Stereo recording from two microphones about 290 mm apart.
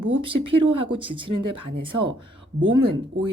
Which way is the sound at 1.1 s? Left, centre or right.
Right.